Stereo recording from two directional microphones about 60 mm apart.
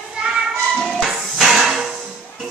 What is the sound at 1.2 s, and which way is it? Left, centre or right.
Hammer, centre.